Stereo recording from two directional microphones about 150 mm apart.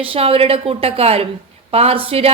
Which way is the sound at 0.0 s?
40° right (ahead or behind).